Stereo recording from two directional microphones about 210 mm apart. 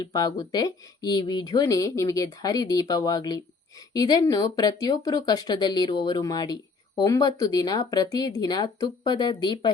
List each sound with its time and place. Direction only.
0.0 s speech: 20° left (ahead or behind)